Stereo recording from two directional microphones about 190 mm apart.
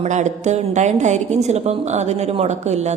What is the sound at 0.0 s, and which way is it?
A woman's voice, 40° right (ahead or behind).